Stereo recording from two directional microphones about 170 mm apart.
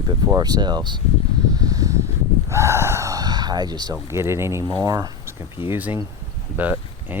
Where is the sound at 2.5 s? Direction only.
15° right (ahead or behind).